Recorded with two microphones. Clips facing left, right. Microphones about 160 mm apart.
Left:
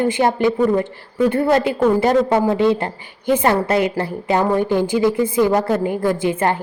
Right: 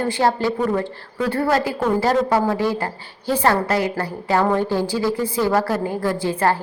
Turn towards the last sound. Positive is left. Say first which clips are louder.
# left 2 dB
turn(degrees=20)  # may be behind; listen again after turning